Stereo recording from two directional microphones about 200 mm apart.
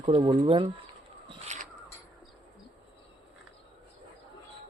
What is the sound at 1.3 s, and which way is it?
Crow, 35° right (ahead or behind).